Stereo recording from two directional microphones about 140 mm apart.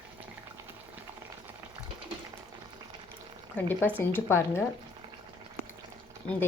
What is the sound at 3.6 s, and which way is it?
A woman's voice, 10° left (ahead or behind).